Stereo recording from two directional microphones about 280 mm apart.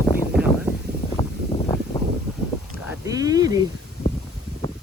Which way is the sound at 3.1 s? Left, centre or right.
Centre.